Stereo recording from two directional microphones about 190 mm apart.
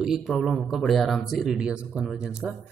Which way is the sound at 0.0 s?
5° right (ahead or behind).